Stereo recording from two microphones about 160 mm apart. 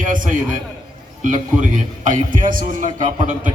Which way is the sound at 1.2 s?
55° right (ahead or behind).